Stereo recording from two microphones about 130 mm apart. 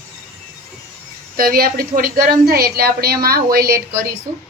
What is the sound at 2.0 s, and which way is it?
Speech, 90° right.